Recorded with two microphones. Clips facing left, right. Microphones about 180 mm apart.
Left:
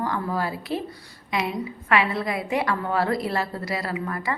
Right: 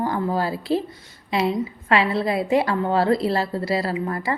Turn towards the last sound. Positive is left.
turn(degrees=-30)  # may be behind; listen again after turning